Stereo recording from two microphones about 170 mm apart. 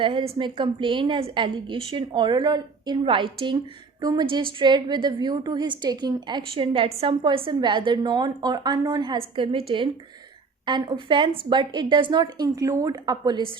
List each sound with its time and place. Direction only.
0.0 s a woman's voice: 30° right (ahead or behind)